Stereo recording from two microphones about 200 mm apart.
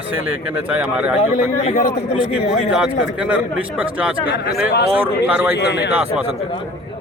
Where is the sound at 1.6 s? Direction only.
40° left (ahead or behind).